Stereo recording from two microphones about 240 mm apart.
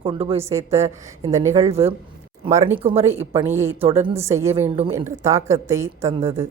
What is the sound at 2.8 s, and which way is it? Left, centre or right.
Speech, right.